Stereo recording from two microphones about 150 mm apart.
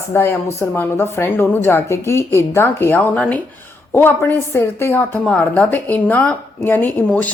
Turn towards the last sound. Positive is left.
turn(degrees=10)  # may be behind; listen again after turning